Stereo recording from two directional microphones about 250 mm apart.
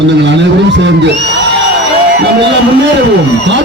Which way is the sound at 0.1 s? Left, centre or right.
Right.